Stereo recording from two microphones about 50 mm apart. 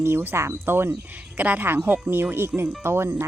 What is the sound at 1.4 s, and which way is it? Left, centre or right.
Speech, right.